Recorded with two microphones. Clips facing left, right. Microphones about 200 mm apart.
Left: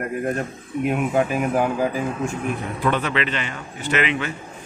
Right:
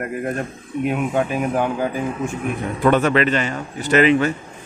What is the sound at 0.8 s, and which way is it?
Speech, centre (ahead or behind).